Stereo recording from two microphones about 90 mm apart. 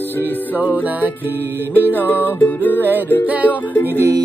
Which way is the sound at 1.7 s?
20° left (ahead or behind).